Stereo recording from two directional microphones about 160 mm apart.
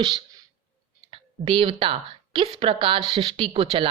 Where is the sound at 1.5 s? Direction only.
35° right (ahead or behind).